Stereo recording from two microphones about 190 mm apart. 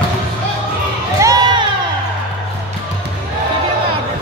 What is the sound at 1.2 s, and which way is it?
Crowd, 20° right (ahead or behind).